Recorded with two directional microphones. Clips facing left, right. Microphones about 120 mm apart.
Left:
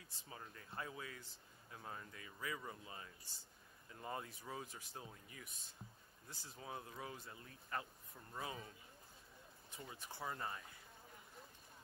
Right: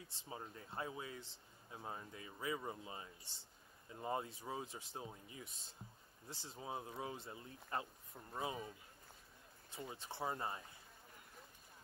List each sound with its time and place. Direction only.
0.1 s a man's voice: 25° right (ahead or behind)